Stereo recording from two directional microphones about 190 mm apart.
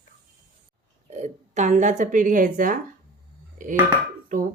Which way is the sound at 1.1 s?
40° right (ahead or behind).